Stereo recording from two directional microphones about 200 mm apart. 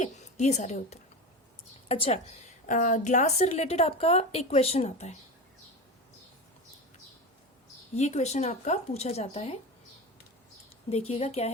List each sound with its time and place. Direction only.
0.0 s a woman's voice: 35° left (ahead or behind)
2.6 s a woman's voice: 40° left (ahead or behind)
7.9 s a woman's voice: 35° left (ahead or behind)
11.1 s a woman's voice: 30° left (ahead or behind)